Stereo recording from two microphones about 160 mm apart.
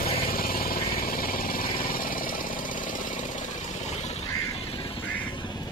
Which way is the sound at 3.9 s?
45° left (ahead or behind).